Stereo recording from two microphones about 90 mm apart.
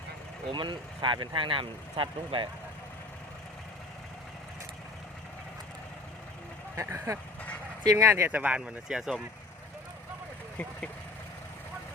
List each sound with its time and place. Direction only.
0.5 s speech: 60° right (ahead or behind)
6.7 s speech: 30° right (ahead or behind)
8.3 s speech: 15° right (ahead or behind)